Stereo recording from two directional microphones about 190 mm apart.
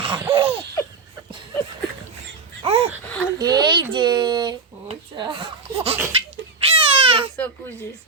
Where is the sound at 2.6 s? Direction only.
30° right (ahead or behind).